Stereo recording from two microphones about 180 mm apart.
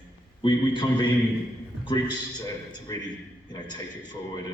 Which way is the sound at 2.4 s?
20° left (ahead or behind).